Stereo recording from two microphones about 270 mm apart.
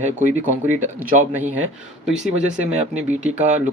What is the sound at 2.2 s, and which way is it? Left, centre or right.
Speech, right.